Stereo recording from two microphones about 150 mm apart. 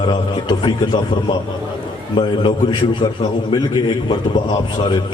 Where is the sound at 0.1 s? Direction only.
30° left (ahead or behind).